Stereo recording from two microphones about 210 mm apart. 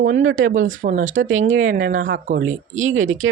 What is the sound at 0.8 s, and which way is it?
Speech, 35° right (ahead or behind).